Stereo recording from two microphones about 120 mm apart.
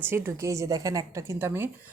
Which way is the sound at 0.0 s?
20° right (ahead or behind).